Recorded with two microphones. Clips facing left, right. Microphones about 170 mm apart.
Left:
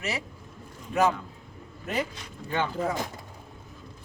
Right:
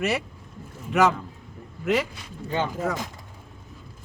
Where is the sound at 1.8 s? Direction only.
90° right.